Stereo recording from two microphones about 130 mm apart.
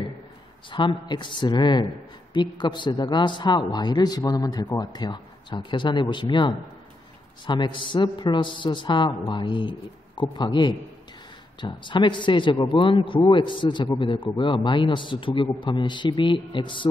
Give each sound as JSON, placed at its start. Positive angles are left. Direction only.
{"t": 0.7, "sound": "speech", "side_deg": 40}